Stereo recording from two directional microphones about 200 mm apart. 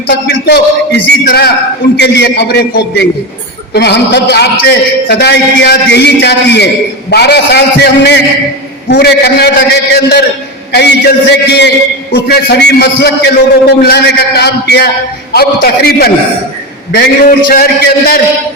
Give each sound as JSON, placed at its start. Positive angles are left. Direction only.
{"t": 0.1, "sound": "a man's voice", "side_deg": 55}